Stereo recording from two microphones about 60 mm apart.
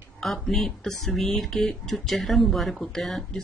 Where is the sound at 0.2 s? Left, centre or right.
Centre.